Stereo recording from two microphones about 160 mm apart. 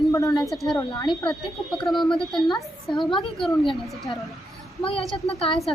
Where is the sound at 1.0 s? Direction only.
25° left (ahead or behind).